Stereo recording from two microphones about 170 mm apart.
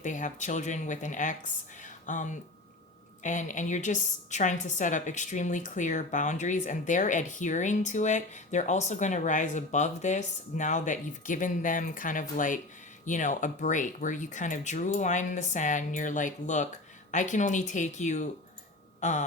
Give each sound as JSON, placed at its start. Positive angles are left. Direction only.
{"t": 0.0, "sound": "a woman's voice", "side_deg": 45}
{"t": 1.8, "sound": "a sound", "side_deg": 50}
{"t": 3.2, "sound": "a woman's voice", "side_deg": 50}
{"t": 18.9, "sound": "tick-tock", "side_deg": 45}